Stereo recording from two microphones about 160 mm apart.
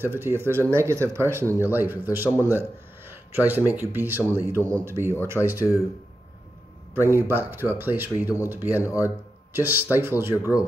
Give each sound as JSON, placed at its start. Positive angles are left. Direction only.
{"t": 0.0, "sound": "speech", "side_deg": -15}
{"t": 7.1, "sound": "speech", "side_deg": -15}